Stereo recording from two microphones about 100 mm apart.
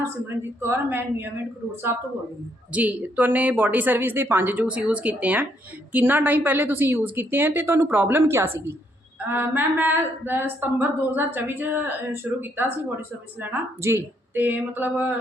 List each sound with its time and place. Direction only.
0.6 s a woman's voice: 25° right (ahead or behind)